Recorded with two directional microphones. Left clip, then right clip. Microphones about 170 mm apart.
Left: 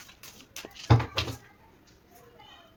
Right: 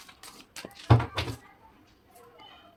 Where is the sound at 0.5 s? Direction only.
10° right (ahead or behind).